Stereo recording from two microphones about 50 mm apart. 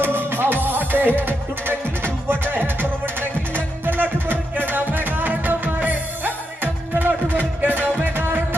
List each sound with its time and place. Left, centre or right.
0.3 s music: right